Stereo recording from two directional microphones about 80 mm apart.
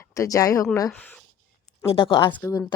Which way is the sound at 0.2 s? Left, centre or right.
Left.